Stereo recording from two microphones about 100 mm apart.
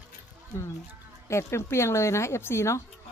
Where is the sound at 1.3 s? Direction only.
25° left (ahead or behind).